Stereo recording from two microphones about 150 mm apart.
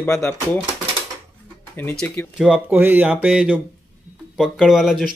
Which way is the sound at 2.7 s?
15° right (ahead or behind).